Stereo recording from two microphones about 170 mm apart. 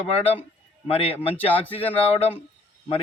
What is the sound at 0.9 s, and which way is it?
Speech, 35° left (ahead or behind).